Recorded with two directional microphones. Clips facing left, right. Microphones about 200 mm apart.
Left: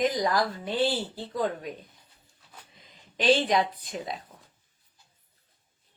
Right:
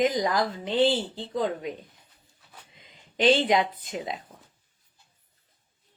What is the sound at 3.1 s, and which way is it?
Speech, 25° right (ahead or behind).